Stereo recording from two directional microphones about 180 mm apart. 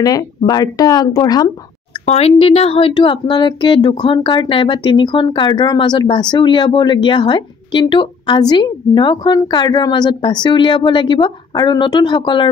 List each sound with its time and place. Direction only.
0.0 s speech: 20° left (ahead or behind)
2.0 s speech: 35° left (ahead or behind)